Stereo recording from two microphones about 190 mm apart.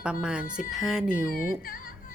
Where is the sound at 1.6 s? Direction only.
50° left (ahead or behind).